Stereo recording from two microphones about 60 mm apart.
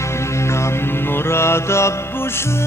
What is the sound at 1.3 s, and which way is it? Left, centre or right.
Mantra, left.